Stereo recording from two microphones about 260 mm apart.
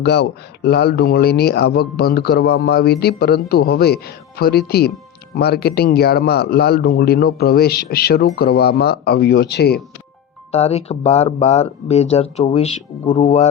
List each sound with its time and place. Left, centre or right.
0.0 s speech: left
10.5 s speech: left